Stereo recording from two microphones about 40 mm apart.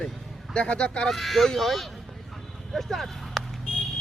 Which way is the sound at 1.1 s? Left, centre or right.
Centre.